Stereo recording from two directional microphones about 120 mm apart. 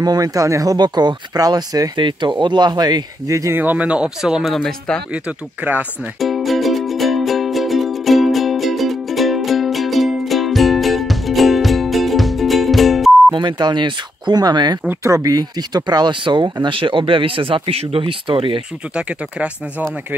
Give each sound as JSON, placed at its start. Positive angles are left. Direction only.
{"t": 0.0, "sound": "speech", "side_deg": -30}
{"t": 3.6, "sound": "speech", "side_deg": -10}
{"t": 5.1, "sound": "speech", "side_deg": -10}
{"t": 6.1, "sound": "music", "side_deg": 0}
{"t": 13.3, "sound": "speech", "side_deg": -35}
{"t": 14.9, "sound": "speech", "side_deg": -25}
{"t": 18.9, "sound": "speech", "side_deg": -10}